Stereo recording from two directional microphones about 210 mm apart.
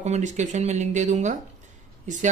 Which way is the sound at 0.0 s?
35° right (ahead or behind).